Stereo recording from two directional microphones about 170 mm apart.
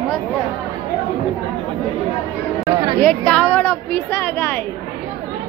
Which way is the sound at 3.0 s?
5° left (ahead or behind).